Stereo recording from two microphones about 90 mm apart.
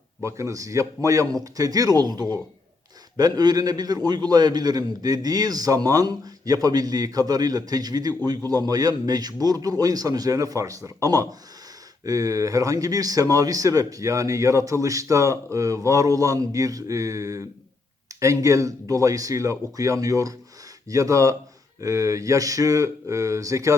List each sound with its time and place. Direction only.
0.2 s a man's voice: 35° right (ahead or behind)